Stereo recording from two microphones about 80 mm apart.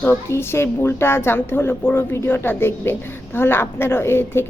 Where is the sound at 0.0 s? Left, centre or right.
Left.